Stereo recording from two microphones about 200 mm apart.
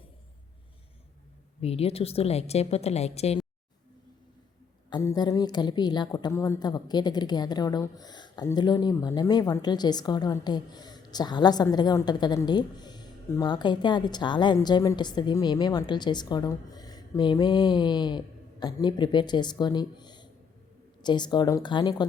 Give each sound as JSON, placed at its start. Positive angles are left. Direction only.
{"t": 1.6, "sound": "speech", "side_deg": 30}
{"t": 4.9, "sound": "a woman's voice", "side_deg": 20}